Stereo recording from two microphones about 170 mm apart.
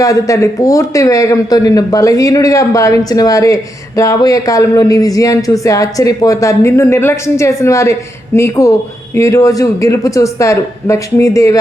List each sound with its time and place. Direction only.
0.0 s speech: 20° left (ahead or behind)